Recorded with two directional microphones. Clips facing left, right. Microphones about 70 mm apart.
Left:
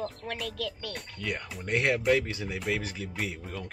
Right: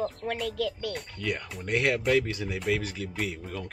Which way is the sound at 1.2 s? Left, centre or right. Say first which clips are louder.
Right 2 dB; centre.